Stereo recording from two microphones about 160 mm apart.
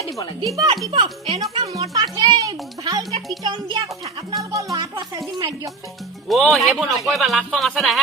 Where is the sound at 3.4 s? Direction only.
25° right (ahead or behind).